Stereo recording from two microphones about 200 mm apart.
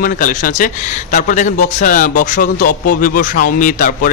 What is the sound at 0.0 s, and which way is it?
Speech, 40° left (ahead or behind).